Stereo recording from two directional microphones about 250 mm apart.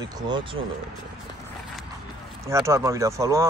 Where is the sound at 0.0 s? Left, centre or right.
Centre.